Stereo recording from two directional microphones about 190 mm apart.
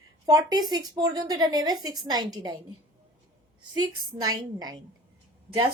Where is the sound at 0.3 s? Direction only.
20° right (ahead or behind).